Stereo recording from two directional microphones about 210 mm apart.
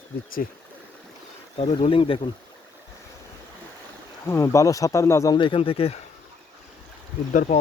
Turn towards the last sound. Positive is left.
turn(degrees=40)  # may be behind; listen again after turning